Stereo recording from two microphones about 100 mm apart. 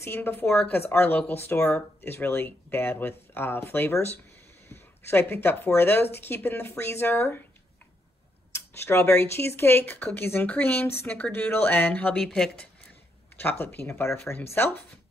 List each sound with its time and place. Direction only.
0.0 s speech: 25° left (ahead or behind)
8.5 s speech: 25° left (ahead or behind)
13.4 s speech: 20° left (ahead or behind)